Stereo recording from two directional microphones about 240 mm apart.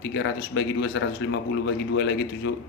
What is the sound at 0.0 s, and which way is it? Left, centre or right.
A man's voice, left.